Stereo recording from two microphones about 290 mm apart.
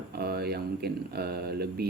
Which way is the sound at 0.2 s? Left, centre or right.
Right.